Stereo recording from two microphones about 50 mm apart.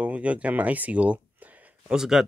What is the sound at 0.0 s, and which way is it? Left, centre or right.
Speech, right.